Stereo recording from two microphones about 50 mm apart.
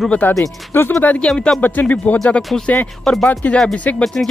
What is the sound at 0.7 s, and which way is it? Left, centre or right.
Speech, left.